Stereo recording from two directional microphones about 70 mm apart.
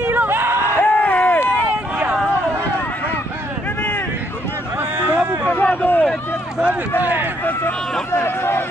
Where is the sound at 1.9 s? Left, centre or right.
Centre.